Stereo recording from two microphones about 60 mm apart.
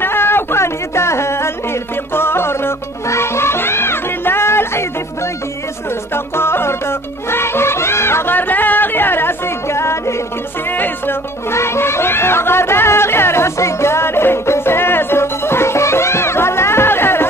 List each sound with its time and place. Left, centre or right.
0.0 s music: left
6.1 s music: left
11.5 s a sound: left